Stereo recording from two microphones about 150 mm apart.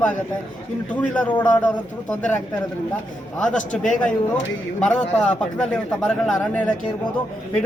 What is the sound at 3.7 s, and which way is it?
Speech, 60° left (ahead or behind).